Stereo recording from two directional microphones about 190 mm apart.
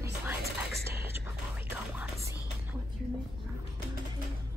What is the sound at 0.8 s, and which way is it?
Whispering, 10° right (ahead or behind).